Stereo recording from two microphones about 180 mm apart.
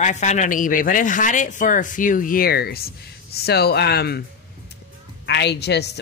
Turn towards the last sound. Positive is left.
turn(degrees=65)  # may be behind; listen again after turning